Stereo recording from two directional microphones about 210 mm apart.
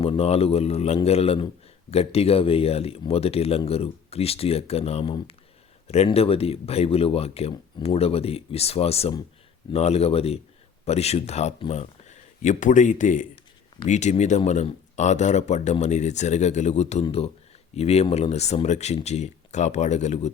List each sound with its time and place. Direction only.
0.0 s speech: 30° left (ahead or behind)